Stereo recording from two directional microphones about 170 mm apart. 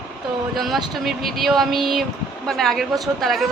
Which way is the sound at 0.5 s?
Centre (ahead or behind).